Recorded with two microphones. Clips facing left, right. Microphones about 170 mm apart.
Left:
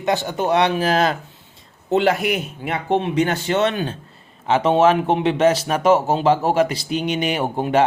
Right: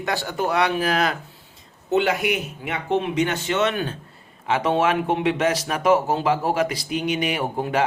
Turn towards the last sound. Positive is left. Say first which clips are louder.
# left 5 dB
turn(degrees=30)  # may be behind; listen again after turning